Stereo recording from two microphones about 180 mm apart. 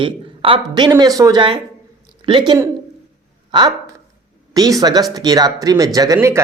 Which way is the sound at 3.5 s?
25° right (ahead or behind).